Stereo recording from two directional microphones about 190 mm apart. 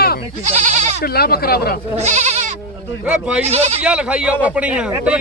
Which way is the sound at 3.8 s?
5° right (ahead or behind).